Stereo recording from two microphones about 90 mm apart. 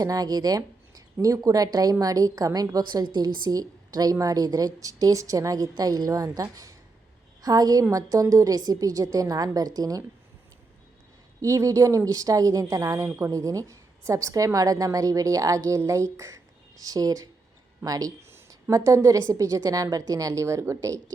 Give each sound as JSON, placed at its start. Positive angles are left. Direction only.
{"t": 0.0, "sound": "a woman's voice", "side_deg": -40}
{"t": 11.4, "sound": "a woman's voice", "side_deg": -35}
{"t": 18.3, "sound": "a sound", "side_deg": -25}
{"t": 18.7, "sound": "a woman's voice", "side_deg": -35}